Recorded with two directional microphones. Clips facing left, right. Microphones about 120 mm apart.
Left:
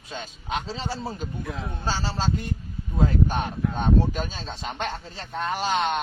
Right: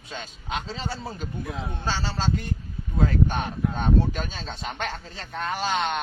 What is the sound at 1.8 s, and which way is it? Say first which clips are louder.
A man's voice: left 1 dB; 30° left (ahead or behind).